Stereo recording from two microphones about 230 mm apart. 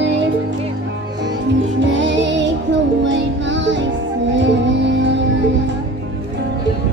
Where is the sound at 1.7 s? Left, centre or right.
Right.